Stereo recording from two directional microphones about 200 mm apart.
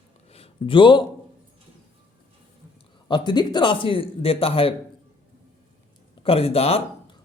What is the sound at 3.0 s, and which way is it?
Speech, 25° left (ahead or behind).